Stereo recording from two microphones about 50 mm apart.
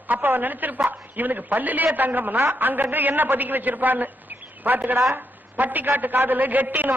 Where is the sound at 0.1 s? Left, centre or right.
Right.